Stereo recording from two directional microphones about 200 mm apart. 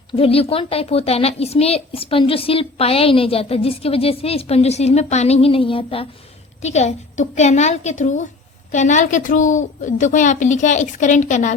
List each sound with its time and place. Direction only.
0.1 s a woman's voice: 30° left (ahead or behind)